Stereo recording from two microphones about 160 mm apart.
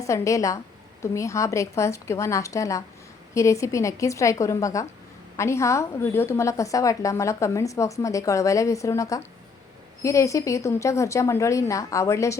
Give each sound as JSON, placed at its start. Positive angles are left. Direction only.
{"t": 0.0, "sound": "a woman's voice", "side_deg": 20}